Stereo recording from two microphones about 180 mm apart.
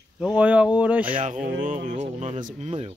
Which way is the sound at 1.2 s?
45° right (ahead or behind).